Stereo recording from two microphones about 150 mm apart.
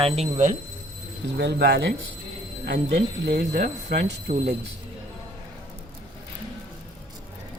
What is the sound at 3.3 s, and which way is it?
Speech, 90° right.